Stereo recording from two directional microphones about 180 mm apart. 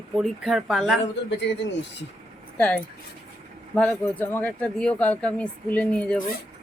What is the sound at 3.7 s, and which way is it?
Speech, 10° left (ahead or behind).